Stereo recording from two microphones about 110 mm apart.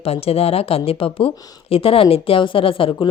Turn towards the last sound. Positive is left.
turn(degrees=55)  # may be behind; listen again after turning